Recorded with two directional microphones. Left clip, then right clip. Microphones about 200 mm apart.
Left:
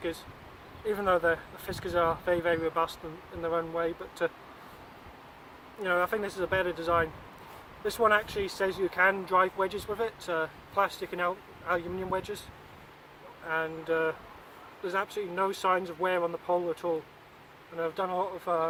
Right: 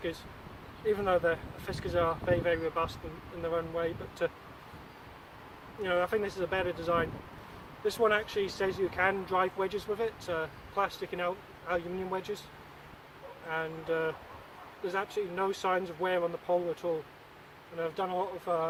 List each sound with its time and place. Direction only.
0.9 s speech: 25° left (ahead or behind)
5.8 s speech: 25° left (ahead or behind)
13.5 s speech: 20° left (ahead or behind)